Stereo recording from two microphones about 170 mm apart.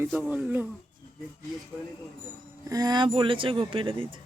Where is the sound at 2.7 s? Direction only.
25° right (ahead or behind).